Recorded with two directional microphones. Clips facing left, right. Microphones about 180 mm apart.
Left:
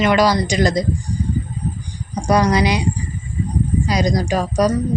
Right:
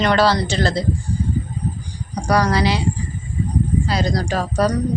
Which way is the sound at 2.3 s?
20° left (ahead or behind).